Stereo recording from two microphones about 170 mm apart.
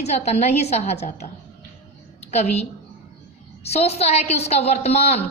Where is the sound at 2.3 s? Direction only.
40° left (ahead or behind).